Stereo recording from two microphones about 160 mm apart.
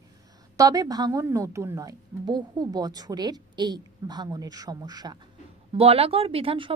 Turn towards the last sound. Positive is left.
turn(degrees=-35)  # may be behind; listen again after turning